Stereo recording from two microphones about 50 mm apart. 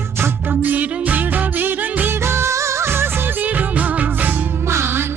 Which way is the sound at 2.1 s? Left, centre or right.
Right.